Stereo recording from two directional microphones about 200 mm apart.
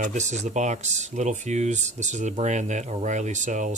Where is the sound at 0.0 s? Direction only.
35° right (ahead or behind).